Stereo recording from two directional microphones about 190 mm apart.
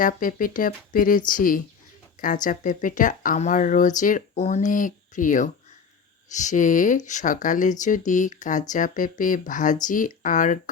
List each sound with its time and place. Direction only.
0.0 s speech: 45° left (ahead or behind)